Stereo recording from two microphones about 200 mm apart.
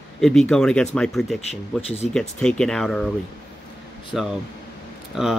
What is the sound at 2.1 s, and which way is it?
Speech, 5° left (ahead or behind).